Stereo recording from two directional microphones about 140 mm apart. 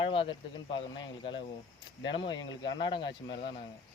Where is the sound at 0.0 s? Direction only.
40° left (ahead or behind).